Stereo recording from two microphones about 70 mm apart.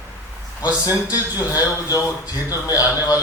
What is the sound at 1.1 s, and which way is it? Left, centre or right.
A man's voice, left.